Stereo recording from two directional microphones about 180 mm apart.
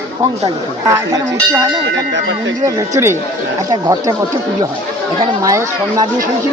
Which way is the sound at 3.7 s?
20° right (ahead or behind).